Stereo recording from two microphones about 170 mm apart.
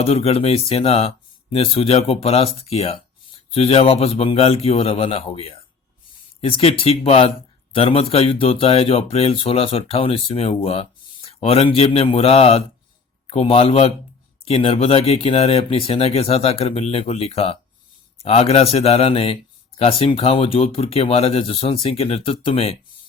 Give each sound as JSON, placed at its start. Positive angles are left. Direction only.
{"t": 0.0, "sound": "speech", "side_deg": 35}